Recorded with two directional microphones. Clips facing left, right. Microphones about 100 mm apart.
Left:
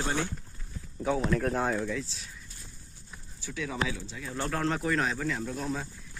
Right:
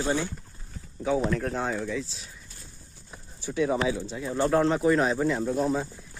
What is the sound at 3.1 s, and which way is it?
Bird, 30° right (ahead or behind).